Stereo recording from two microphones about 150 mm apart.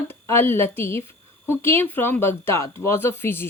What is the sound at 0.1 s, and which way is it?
A woman's voice, 15° left (ahead or behind).